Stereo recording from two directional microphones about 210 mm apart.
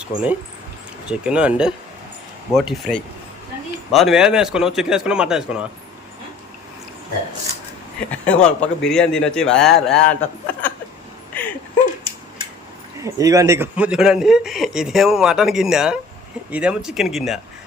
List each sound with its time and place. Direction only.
0.0 s a man's voice: 5° right (ahead or behind)
8.1 s a man's voice: 5° left (ahead or behind)
11.3 s a sound: 5° left (ahead or behind)
13.1 s a man's voice: 15° right (ahead or behind)